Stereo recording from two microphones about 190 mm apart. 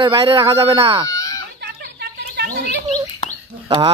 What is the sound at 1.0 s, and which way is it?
Chicken, 15° left (ahead or behind).